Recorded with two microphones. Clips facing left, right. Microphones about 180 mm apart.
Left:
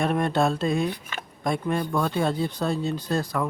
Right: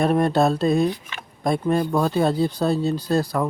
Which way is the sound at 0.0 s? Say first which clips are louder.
Right 4 dB; 35° right (ahead or behind).